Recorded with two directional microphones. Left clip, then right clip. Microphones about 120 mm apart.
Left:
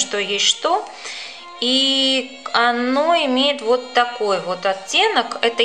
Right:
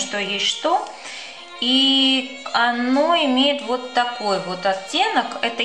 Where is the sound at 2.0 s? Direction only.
35° left (ahead or behind).